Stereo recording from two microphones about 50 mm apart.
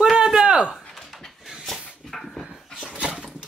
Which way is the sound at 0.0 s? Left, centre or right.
Centre.